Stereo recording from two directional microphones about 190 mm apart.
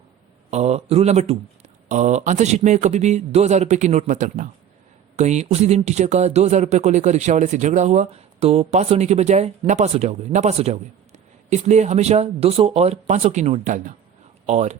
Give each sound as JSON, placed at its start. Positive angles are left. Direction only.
{"t": 0.5, "sound": "speech", "side_deg": -35}